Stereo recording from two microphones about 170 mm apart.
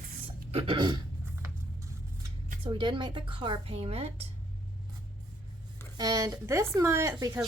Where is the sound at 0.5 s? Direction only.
30° right (ahead or behind).